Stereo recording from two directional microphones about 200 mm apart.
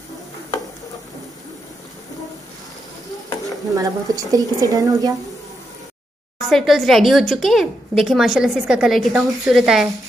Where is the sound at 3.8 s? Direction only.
20° right (ahead or behind).